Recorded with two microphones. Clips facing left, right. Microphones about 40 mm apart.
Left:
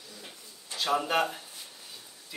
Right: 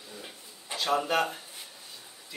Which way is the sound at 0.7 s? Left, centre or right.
Centre.